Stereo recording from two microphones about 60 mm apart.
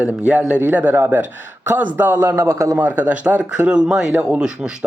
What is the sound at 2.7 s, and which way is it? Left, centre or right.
Speech, right.